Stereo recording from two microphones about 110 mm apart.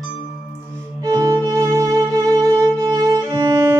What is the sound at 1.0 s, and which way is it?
Violin, 35° right (ahead or behind).